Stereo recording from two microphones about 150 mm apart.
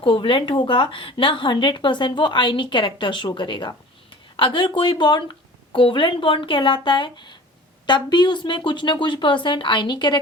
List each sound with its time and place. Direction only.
0.0 s speech: 35° left (ahead or behind)